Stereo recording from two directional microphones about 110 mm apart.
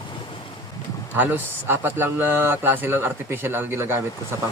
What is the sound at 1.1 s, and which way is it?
Speech, 15° right (ahead or behind).